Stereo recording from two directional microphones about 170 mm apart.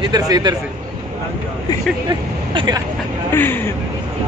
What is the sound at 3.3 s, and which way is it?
Speech, 10° left (ahead or behind).